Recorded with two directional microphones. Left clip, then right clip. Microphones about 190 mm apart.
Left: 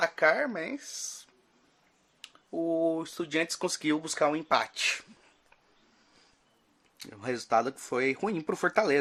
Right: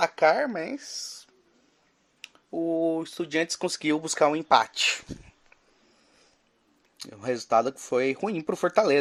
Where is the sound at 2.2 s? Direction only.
15° right (ahead or behind).